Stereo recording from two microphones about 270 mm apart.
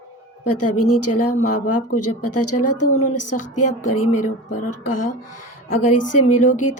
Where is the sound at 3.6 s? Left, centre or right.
Left.